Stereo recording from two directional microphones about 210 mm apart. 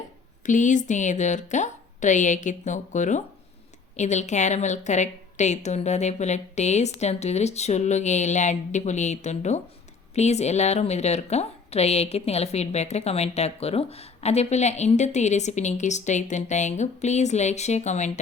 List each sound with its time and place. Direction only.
0.4 s a woman's voice: 35° left (ahead or behind)